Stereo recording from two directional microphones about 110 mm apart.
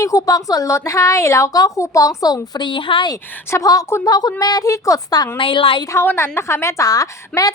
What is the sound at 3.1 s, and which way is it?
A woman's voice, 35° left (ahead or behind).